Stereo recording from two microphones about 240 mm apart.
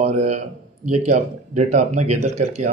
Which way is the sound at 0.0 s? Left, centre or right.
Right.